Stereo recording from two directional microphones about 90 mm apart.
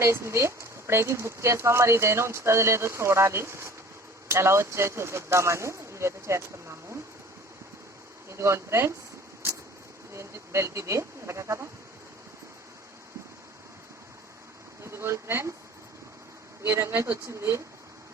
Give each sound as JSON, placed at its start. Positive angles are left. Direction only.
{"t": 0.0, "sound": "speech", "side_deg": -30}
{"t": 8.3, "sound": "speech", "side_deg": -30}
{"t": 10.2, "sound": "speech", "side_deg": -30}
{"t": 14.8, "sound": "speech", "side_deg": -30}
{"t": 16.6, "sound": "speech", "side_deg": -30}